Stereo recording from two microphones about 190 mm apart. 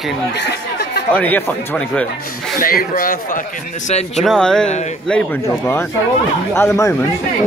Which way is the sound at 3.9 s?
35° left (ahead or behind).